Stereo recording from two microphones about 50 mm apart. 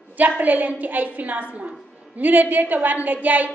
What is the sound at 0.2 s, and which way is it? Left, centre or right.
A woman's voice, right.